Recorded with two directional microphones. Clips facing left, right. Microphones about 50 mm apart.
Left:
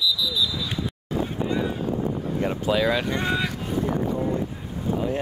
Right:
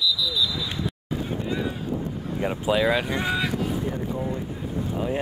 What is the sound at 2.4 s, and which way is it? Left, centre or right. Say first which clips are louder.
Speech: right 1 dB; centre.